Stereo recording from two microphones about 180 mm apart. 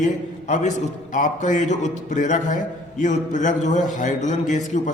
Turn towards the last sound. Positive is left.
turn(degrees=45)  # may be behind; listen again after turning